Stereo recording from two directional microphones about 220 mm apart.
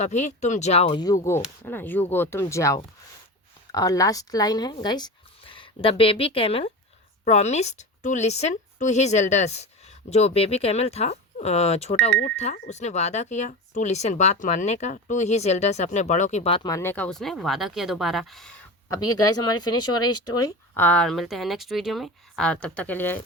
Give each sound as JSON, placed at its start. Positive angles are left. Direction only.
{"t": 0.0, "sound": "a woman's voice", "side_deg": 30}
{"t": 18.9, "sound": "speech", "side_deg": 15}